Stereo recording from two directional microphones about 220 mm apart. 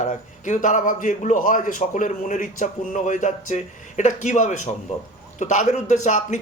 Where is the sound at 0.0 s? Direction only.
35° left (ahead or behind).